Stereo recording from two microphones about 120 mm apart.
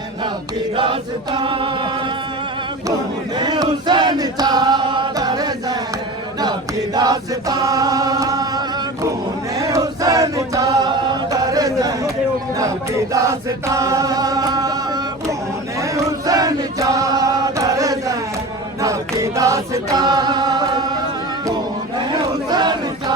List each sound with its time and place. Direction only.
0.8 s chant: 45° right (ahead or behind)
3.3 s chant: 35° right (ahead or behind)
5.1 s music: 35° right (ahead or behind)
6.4 s chant: 35° right (ahead or behind)
18.8 s choir: 25° right (ahead or behind)
22.1 s battle cry: 35° right (ahead or behind)